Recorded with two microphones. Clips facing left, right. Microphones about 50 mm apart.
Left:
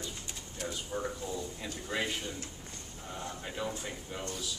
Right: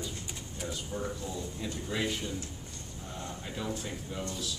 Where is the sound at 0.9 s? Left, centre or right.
Left.